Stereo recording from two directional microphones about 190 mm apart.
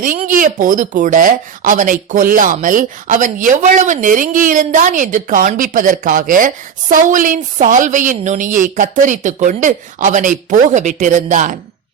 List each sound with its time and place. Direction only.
0.0 s speech: 45° right (ahead or behind)